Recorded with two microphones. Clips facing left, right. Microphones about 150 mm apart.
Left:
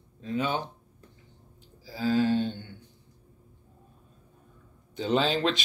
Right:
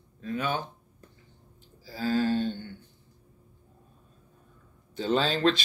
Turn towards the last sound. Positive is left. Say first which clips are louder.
# right 1 dB
turn(degrees=15)  # may be behind; listen again after turning